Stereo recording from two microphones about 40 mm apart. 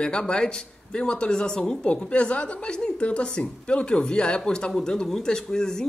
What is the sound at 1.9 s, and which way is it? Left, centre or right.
A man's voice, left.